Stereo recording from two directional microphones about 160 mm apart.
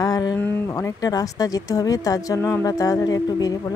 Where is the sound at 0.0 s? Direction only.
25° left (ahead or behind).